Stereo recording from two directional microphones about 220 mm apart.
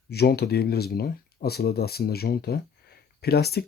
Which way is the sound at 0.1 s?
45° left (ahead or behind).